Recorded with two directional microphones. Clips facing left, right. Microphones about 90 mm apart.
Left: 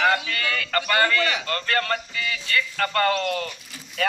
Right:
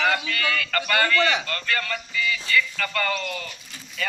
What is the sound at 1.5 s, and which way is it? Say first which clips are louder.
Speech: left 3 dB; 35° left (ahead or behind).